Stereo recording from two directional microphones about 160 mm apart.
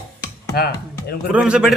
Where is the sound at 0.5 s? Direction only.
75° left (ahead or behind).